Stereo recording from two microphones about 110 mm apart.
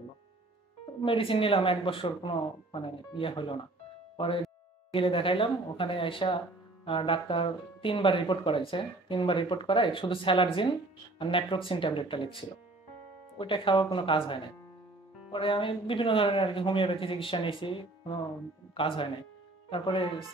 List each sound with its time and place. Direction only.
1.0 s speech: 55° left (ahead or behind)
4.9 s speech: 55° left (ahead or behind)